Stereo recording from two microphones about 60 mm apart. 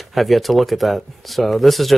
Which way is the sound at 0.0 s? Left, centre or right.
Centre.